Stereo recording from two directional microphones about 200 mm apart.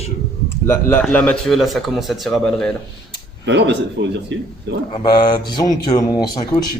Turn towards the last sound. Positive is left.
turn(degrees=20)  # may be behind; listen again after turning